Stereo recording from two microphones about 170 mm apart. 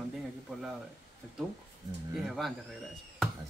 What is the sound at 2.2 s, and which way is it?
Speech, centre (ahead or behind).